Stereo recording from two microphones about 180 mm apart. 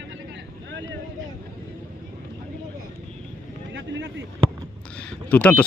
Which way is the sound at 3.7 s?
80° right.